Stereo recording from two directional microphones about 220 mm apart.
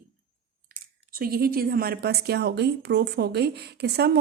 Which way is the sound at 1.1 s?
45° right (ahead or behind).